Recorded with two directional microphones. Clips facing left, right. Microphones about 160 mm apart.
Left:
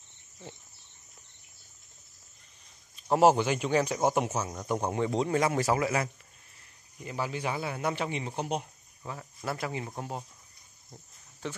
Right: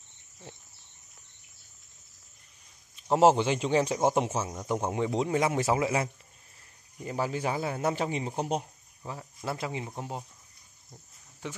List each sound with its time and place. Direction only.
3.0 s speech: 20° right (ahead or behind)
4.5 s speech: 10° right (ahead or behind)
7.0 s speech: 35° right (ahead or behind)
9.0 s speech: 20° right (ahead or behind)